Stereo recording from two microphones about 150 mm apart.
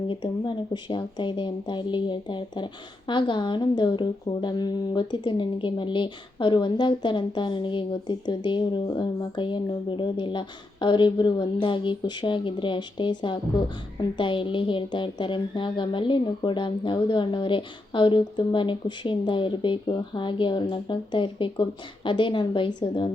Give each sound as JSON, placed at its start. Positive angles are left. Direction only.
{"t": 0.1, "sound": "speech", "side_deg": 30}